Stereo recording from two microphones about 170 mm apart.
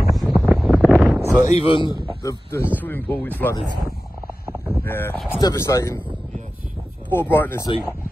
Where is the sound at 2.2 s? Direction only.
15° left (ahead or behind).